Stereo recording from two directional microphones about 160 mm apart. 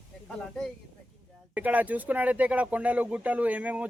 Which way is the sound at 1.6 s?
10° right (ahead or behind).